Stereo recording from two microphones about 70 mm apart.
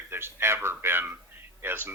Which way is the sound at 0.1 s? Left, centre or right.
Right.